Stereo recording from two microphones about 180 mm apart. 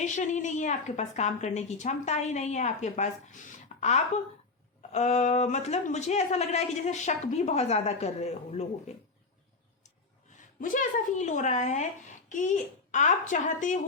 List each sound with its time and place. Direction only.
0.0 s speech: 40° left (ahead or behind)
10.6 s a child's voice: 45° left (ahead or behind)